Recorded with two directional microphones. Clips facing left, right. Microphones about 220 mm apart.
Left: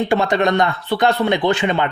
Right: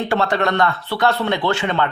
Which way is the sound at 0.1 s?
15° left (ahead or behind).